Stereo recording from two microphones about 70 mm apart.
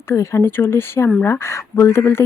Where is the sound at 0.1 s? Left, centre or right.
Left.